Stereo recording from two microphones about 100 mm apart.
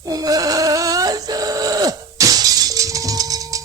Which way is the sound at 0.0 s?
40° right (ahead or behind).